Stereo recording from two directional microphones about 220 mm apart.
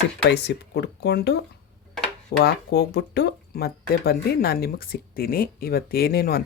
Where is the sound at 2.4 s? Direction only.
50° left (ahead or behind).